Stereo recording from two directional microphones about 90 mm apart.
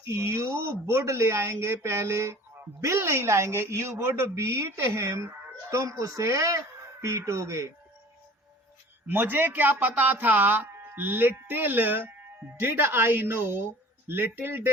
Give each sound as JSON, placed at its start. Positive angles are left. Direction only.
{"t": 0.1, "sound": "a woman's voice", "side_deg": -30}
{"t": 9.0, "sound": "speech", "side_deg": -25}